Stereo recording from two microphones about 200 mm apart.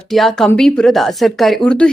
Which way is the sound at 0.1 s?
Centre (ahead or behind).